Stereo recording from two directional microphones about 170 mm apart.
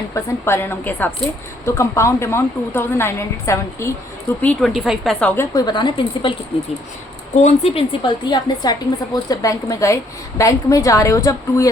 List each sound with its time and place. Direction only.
0.1 s a woman's voice: 15° left (ahead or behind)
4.4 s a woman's voice: 5° left (ahead or behind)
5.4 s a woman's voice: 25° left (ahead or behind)